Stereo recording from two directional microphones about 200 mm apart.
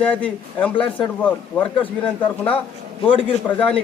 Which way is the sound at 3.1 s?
25° left (ahead or behind).